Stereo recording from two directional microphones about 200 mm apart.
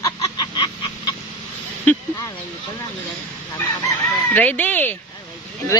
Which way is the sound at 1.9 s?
10° left (ahead or behind).